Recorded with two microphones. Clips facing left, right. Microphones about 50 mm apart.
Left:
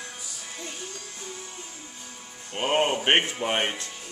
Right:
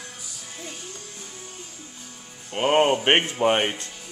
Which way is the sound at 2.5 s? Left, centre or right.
Right.